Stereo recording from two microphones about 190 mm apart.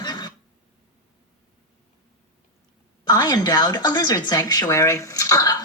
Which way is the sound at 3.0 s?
20° left (ahead or behind).